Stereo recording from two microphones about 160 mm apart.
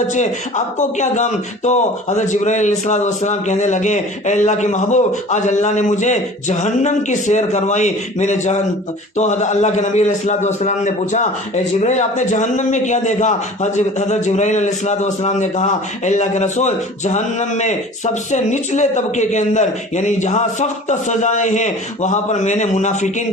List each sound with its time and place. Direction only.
0.1 s a man's voice: 50° left (ahead or behind)